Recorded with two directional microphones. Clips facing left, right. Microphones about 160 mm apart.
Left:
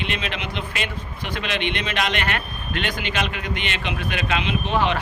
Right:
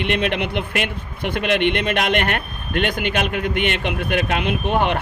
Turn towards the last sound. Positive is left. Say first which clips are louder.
# right 2 dB
turn(degrees=-55)  # may be behind; listen again after turning